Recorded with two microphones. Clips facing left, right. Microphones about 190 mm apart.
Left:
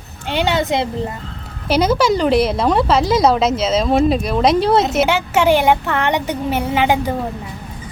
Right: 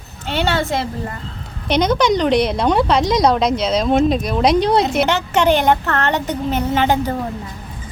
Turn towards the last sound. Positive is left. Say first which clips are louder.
# even
turn(degrees=10)  # may be behind; listen again after turning